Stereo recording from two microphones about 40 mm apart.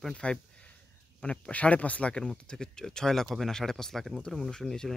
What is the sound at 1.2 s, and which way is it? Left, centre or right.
Speech, left.